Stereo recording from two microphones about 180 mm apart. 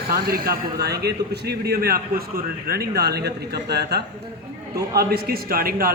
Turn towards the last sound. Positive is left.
turn(degrees=-55)  # may be behind; listen again after turning